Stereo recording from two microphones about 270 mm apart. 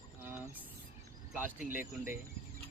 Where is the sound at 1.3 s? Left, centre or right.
Centre.